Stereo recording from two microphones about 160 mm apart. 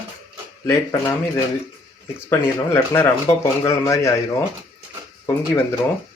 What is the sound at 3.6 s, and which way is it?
Speech, 20° left (ahead or behind).